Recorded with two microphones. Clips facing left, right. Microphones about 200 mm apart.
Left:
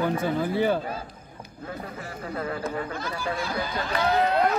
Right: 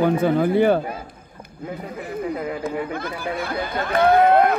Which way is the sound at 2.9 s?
55° right (ahead or behind).